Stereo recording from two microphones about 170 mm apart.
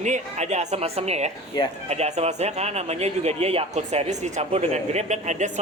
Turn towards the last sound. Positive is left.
turn(degrees=-45)  # may be behind; listen again after turning